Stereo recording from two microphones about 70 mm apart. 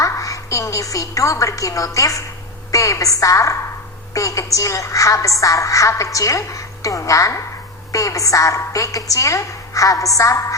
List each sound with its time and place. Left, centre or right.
0.0 s a woman's voice: left